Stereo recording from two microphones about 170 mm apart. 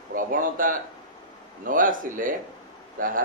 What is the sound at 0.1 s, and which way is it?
A man's voice, 55° right (ahead or behind).